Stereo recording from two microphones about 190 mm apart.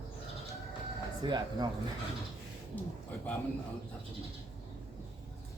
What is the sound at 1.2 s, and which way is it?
Speech, 25° right (ahead or behind).